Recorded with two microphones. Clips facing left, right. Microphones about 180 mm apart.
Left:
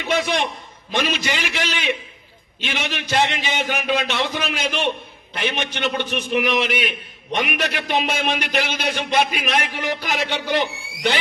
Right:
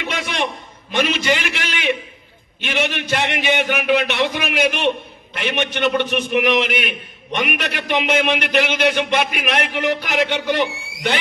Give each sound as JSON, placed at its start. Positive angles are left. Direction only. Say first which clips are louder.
{"t": 0.9, "sound": "a man's voice", "louder": "right 4 dB", "side_deg": -55}